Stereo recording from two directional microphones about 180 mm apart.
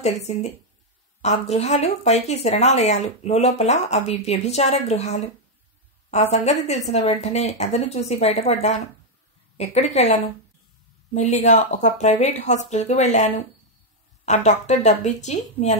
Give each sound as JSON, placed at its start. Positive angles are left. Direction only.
{"t": 0.0, "sound": "a woman's voice", "side_deg": 35}
{"t": 11.1, "sound": "speech", "side_deg": 40}